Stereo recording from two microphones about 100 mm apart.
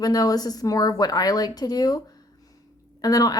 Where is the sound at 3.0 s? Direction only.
40° left (ahead or behind).